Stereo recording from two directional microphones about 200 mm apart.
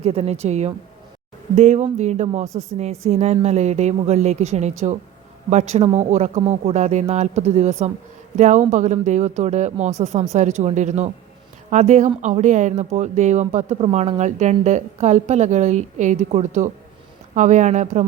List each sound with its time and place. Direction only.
0.0 s speech: 30° right (ahead or behind)